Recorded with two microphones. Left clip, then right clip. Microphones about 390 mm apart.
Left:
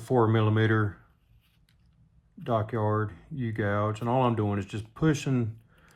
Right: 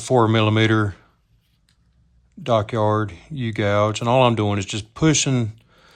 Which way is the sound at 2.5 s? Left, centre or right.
Right.